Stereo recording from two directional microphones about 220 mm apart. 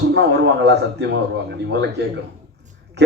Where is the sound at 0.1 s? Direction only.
50° right (ahead or behind).